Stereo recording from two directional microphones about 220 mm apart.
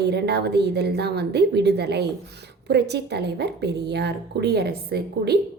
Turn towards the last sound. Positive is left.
turn(degrees=-45)  # may be behind; listen again after turning